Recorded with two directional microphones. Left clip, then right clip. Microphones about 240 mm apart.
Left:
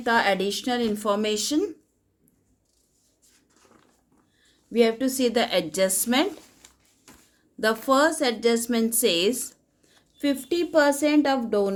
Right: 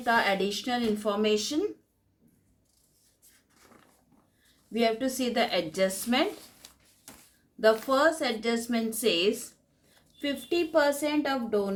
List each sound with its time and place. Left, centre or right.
0.0 s a woman's voice: left
4.7 s a woman's voice: left
7.6 s a woman's voice: left